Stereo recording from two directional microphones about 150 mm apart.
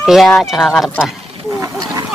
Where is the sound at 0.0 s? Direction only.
Centre (ahead or behind).